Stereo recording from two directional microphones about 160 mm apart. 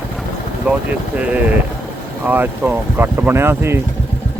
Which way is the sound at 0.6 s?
10° right (ahead or behind).